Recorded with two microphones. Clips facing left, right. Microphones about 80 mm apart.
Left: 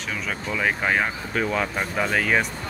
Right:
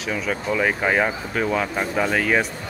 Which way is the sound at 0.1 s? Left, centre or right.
Centre.